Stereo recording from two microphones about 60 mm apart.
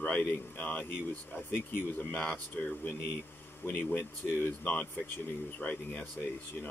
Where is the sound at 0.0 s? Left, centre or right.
Left.